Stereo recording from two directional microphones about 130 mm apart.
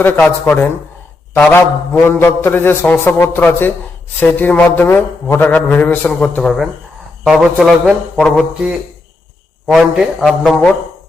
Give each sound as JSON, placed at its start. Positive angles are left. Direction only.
{"t": 0.0, "sound": "a sound", "side_deg": 15}
{"t": 6.3, "sound": "a man's voice", "side_deg": 5}
{"t": 9.6, "sound": "a man's voice", "side_deg": 0}